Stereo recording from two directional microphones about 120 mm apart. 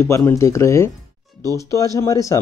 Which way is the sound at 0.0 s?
20° left (ahead or behind).